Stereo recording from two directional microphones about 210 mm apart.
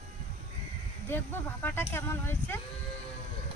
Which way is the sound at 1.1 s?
10° left (ahead or behind).